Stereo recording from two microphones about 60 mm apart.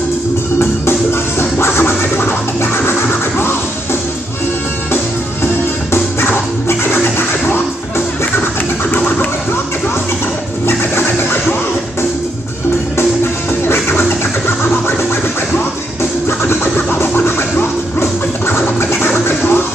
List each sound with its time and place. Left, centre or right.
0.6 s music: left
4.9 s music: left
8.9 s music: left
10.7 s scratching: left
13.7 s music: left
16.0 s scratching: left